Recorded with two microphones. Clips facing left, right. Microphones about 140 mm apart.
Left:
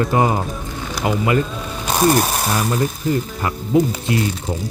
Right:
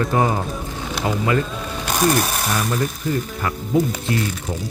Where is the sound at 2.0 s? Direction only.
30° left (ahead or behind).